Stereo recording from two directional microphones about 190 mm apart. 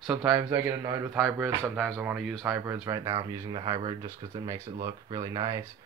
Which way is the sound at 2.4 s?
15° right (ahead or behind).